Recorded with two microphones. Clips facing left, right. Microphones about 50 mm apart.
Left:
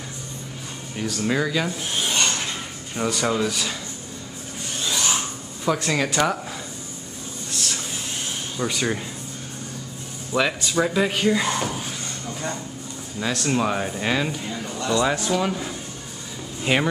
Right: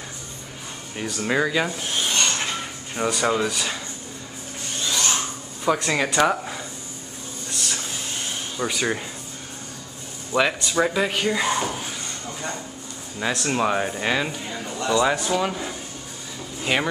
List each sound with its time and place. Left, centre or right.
0.9 s speech: centre
1.8 s filing: centre
3.0 s speech: centre
4.8 s a sound: centre
5.7 s speech: centre
7.5 s a sound: centre
8.5 s speech: centre
10.3 s speech: centre